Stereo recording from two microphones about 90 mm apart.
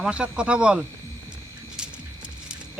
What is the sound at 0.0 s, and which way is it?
Speech, 10° right (ahead or behind).